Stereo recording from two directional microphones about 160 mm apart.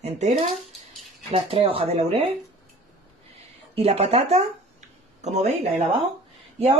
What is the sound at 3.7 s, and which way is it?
Speech, 40° right (ahead or behind).